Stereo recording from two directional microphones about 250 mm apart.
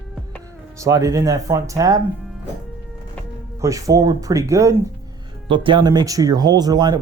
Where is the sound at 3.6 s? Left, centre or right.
Centre.